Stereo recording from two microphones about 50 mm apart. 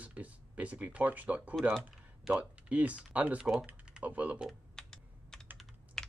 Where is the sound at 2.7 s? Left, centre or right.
Right.